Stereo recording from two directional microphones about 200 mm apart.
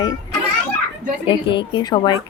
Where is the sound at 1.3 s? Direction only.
25° left (ahead or behind).